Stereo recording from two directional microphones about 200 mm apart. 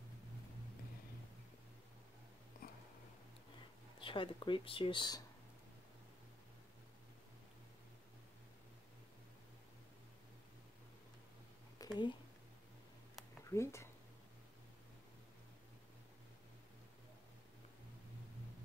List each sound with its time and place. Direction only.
2.6 s a sound: 45° left (ahead or behind)
4.0 s speech: 25° left (ahead or behind)
11.8 s speech: 20° left (ahead or behind)
13.5 s speech: 15° left (ahead or behind)